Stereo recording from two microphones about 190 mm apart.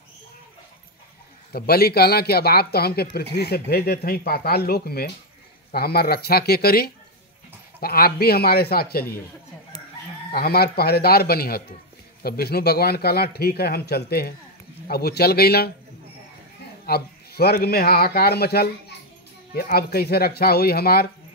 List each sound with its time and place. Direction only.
1.5 s a man's voice: 55° left (ahead or behind)
10.3 s a man's voice: 55° left (ahead or behind)
16.8 s a man's voice: 55° left (ahead or behind)